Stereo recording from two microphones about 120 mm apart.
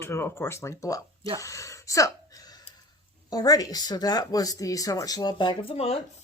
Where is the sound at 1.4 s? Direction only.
25° left (ahead or behind).